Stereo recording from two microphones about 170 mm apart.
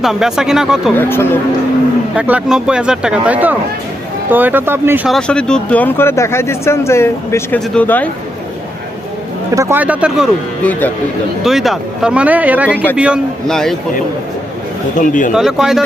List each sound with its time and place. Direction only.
0.0 s speech: centre (ahead or behind)
0.9 s speech: 15° left (ahead or behind)
2.1 s speech: 10° right (ahead or behind)
5.0 s speech: 5° left (ahead or behind)
9.6 s speech: 15° right (ahead or behind)
10.6 s speech: 10° left (ahead or behind)
11.4 s speech: centre (ahead or behind)
14.9 s speech: 50° left (ahead or behind)
15.4 s speech: centre (ahead or behind)